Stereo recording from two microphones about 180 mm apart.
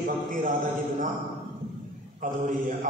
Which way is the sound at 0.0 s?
50° right (ahead or behind).